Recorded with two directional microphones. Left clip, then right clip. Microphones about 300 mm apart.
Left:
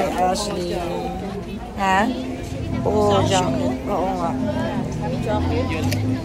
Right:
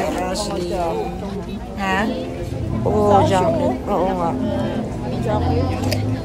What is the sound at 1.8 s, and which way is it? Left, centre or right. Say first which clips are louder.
Speech: left 2 dB; centre.